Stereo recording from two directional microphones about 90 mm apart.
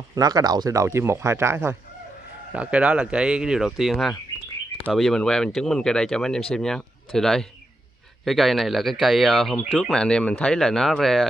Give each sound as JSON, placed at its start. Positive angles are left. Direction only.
{"t": 0.1, "sound": "speech", "side_deg": -45}
{"t": 2.5, "sound": "speech", "side_deg": -15}